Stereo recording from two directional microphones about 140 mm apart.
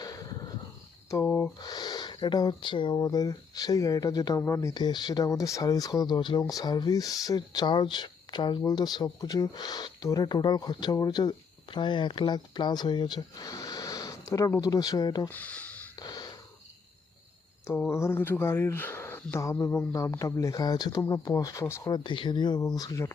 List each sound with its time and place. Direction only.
0.0 s a sound: 25° left (ahead or behind)
1.1 s speech: 15° left (ahead or behind)
1.5 s speech: 30° left (ahead or behind)
15.3 s speech: 10° left (ahead or behind)
16.0 s snort: 30° left (ahead or behind)
17.7 s speech: 15° left (ahead or behind)